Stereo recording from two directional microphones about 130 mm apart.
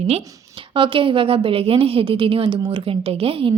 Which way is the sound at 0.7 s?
40° right (ahead or behind).